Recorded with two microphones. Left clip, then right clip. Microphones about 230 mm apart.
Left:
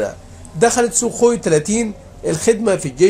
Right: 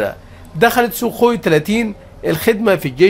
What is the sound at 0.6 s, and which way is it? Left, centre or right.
A man's voice, right.